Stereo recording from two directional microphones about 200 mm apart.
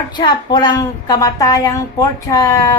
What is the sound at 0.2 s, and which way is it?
A woman's voice, 20° left (ahead or behind).